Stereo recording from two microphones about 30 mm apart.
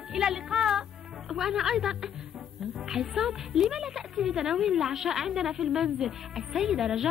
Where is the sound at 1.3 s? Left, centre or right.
Centre.